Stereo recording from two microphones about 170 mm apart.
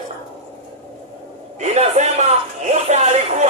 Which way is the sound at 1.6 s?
45° right (ahead or behind).